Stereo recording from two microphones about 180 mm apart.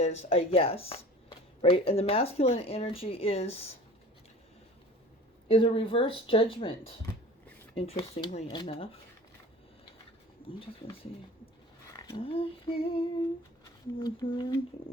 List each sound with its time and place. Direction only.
0.0 s speech: 35° left (ahead or behind)
5.5 s speech: 30° left (ahead or behind)
12.0 s speech: 30° left (ahead or behind)